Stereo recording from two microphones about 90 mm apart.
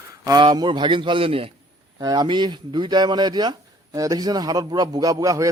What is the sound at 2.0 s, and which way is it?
Speech, 50° right (ahead or behind).